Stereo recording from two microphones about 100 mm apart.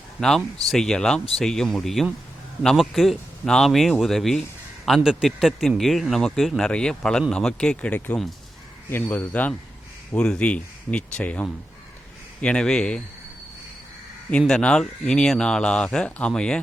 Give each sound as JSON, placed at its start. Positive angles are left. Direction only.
{"t": 0.2, "sound": "speech", "side_deg": 5}
{"t": 14.3, "sound": "speech", "side_deg": 10}